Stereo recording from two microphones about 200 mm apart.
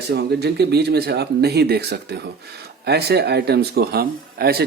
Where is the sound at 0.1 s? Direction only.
55° right (ahead or behind).